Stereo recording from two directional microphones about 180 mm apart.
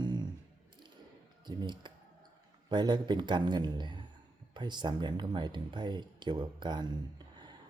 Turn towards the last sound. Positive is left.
turn(degrees=-25)  # may be behind; listen again after turning